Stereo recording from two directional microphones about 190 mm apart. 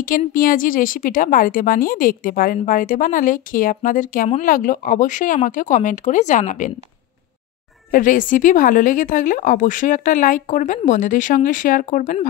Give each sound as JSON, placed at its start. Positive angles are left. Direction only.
{"t": 0.3, "sound": "speech", "side_deg": 45}
{"t": 7.9, "sound": "speech", "side_deg": 45}